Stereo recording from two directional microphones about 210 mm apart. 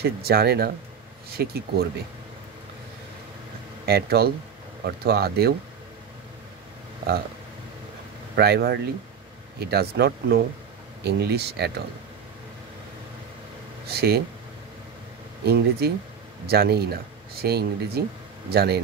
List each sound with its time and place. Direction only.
0.0 s speech: 50° right (ahead or behind)
3.8 s speech: 50° right (ahead or behind)
8.4 s speech: 50° right (ahead or behind)
13.8 s speech: 50° right (ahead or behind)
15.4 s speech: 50° right (ahead or behind)